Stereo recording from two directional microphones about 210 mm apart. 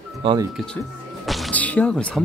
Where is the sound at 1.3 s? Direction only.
5° left (ahead or behind).